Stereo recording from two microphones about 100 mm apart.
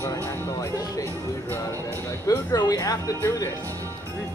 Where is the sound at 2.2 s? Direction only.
40° left (ahead or behind).